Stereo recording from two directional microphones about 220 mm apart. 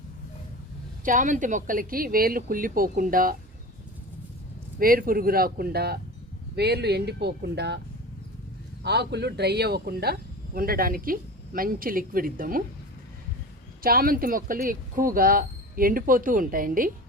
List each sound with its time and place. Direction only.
1.0 s speech: 35° right (ahead or behind)
4.8 s speech: 40° right (ahead or behind)
8.8 s speech: 50° right (ahead or behind)
13.8 s speech: 40° right (ahead or behind)